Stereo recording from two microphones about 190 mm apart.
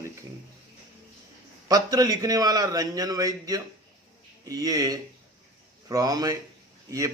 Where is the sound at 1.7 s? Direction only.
20° right (ahead or behind).